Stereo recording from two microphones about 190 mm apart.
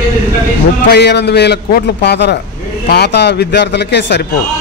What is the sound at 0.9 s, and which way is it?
A man's voice, 60° left (ahead or behind).